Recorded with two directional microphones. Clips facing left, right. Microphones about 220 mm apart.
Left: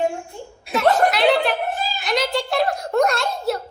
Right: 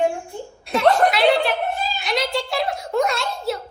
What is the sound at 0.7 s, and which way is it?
Chuckle, 5° left (ahead or behind).